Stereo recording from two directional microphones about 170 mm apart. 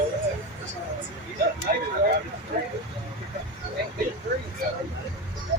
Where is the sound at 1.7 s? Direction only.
60° right (ahead or behind).